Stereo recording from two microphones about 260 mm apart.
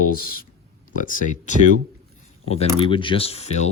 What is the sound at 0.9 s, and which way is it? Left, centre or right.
Speech, left.